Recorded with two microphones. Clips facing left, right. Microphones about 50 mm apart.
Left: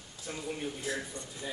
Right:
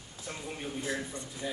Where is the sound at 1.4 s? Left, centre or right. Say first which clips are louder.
Right 3 dB; right.